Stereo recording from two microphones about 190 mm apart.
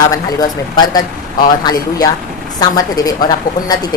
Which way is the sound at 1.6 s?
20° left (ahead or behind).